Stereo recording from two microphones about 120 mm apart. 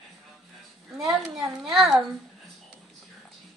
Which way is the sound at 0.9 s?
5° right (ahead or behind).